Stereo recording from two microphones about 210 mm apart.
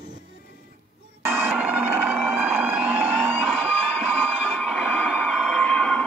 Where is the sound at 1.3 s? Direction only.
5° right (ahead or behind).